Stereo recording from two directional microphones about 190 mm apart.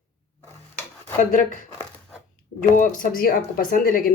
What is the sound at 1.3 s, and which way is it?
Speech, 45° left (ahead or behind).